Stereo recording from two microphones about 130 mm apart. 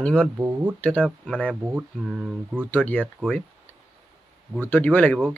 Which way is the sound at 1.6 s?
10° right (ahead or behind).